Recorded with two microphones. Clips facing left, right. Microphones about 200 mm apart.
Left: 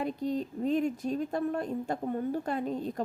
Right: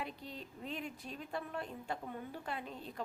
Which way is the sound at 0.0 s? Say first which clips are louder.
Left 14 dB; 45° left (ahead or behind).